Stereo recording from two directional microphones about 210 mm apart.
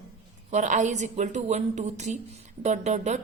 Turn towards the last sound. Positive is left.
turn(degrees=-35)  # may be behind; listen again after turning